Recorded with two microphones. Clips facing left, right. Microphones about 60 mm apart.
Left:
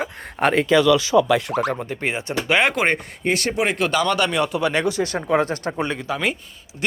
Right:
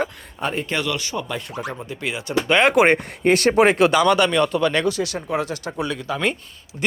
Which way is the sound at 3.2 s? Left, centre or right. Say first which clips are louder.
Right 6 dB; right.